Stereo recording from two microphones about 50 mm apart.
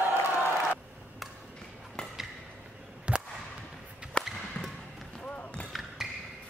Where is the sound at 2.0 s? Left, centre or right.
Centre.